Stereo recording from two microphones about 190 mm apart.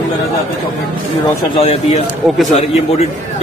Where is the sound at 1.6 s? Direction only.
30° left (ahead or behind).